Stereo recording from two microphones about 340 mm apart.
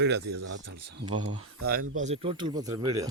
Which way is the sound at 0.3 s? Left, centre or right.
Right.